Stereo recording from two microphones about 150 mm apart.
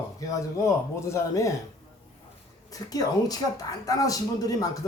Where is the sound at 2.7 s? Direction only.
25° left (ahead or behind).